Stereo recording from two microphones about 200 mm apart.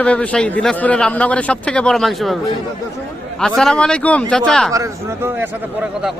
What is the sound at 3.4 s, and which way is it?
A man's voice, 5° left (ahead or behind).